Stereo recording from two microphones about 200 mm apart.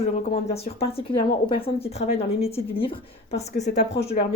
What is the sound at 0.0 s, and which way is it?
Speech, 30° left (ahead or behind).